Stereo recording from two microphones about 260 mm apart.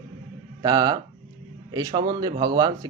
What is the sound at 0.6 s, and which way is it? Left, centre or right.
A man's voice, centre.